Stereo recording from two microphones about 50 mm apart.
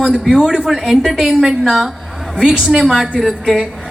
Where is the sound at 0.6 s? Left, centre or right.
Centre.